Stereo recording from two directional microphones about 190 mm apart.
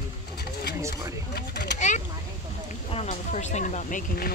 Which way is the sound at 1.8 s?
40° left (ahead or behind).